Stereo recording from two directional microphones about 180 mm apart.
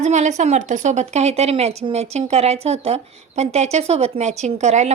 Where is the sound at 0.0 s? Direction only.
40° right (ahead or behind).